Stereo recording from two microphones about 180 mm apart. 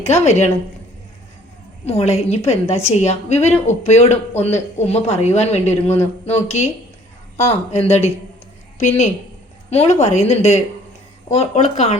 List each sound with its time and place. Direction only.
0.0 s a woman's voice: 35° left (ahead or behind)
1.8 s a woman's voice: 35° left (ahead or behind)